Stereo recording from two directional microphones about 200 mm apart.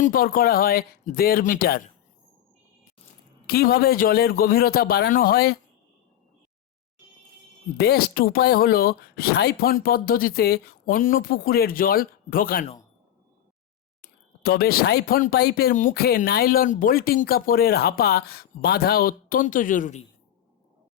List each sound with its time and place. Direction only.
0.0 s speech: 45° left (ahead or behind)
3.4 s speech: 50° left (ahead or behind)
7.8 s speech: 50° left (ahead or behind)
14.0 s speech: 50° left (ahead or behind)